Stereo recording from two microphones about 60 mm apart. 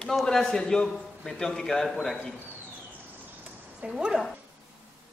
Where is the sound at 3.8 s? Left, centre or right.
Centre.